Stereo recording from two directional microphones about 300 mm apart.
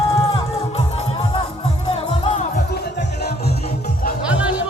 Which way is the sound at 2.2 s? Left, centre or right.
Left.